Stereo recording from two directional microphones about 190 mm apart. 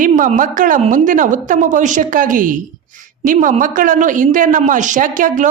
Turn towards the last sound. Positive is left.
turn(degrees=-45)  # may be behind; listen again after turning